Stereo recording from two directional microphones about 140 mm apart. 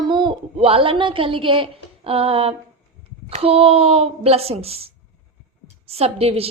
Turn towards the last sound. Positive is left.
turn(degrees=-45)  # may be behind; listen again after turning